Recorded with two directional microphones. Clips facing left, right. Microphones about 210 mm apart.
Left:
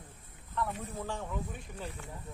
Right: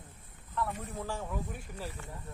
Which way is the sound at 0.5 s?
Centre (ahead or behind).